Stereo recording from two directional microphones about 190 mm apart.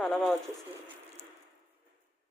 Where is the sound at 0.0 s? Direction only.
5° left (ahead or behind).